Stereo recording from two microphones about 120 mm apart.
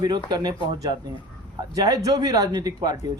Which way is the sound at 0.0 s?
35° right (ahead or behind).